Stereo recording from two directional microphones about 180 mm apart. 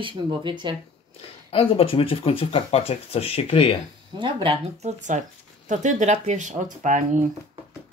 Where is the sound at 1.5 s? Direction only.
30° left (ahead or behind).